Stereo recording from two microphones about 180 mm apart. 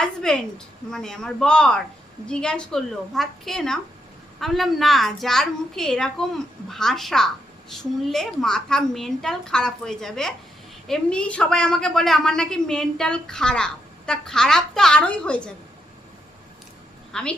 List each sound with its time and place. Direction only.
0.0 s a woman's voice: 5° left (ahead or behind)
17.1 s a woman's voice: 5° left (ahead or behind)